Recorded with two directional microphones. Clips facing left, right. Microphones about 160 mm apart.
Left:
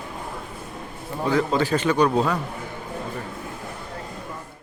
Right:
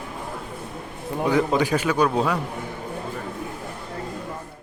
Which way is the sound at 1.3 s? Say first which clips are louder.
Right 1 dB; 15° right (ahead or behind).